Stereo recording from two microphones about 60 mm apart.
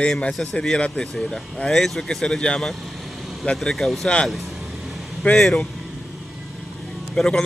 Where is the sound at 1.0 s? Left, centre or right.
Centre.